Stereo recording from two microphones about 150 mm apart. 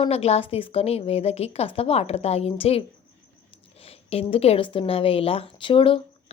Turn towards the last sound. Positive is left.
turn(degrees=35)  # may be behind; listen again after turning